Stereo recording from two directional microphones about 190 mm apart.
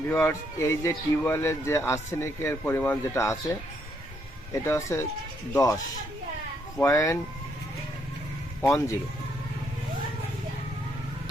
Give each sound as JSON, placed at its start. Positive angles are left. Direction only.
{"t": 0.1, "sound": "speech", "side_deg": 15}
{"t": 4.6, "sound": "speech", "side_deg": 15}
{"t": 8.6, "sound": "speech", "side_deg": 15}